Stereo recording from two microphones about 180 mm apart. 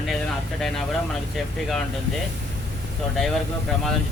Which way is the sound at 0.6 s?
Centre (ahead or behind).